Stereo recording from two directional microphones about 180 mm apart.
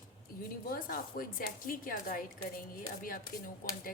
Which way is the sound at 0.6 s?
55° left (ahead or behind).